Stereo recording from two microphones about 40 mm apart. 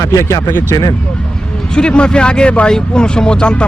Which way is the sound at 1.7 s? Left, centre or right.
Left.